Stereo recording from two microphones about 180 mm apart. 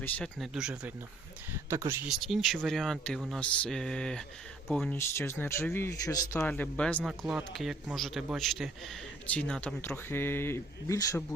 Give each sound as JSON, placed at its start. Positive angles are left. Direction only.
{"t": 0.0, "sound": "speech", "side_deg": 5}
{"t": 1.7, "sound": "speech", "side_deg": -15}
{"t": 2.0, "sound": "speech", "side_deg": 0}
{"t": 4.9, "sound": "speech", "side_deg": 15}